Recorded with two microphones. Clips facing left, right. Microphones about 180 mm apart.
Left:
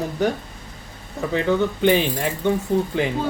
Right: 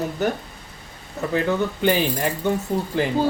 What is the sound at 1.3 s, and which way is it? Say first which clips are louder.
Speech: left 2 dB; 5° right (ahead or behind).